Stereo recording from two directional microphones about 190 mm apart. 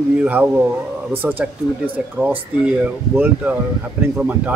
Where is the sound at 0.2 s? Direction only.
5° right (ahead or behind).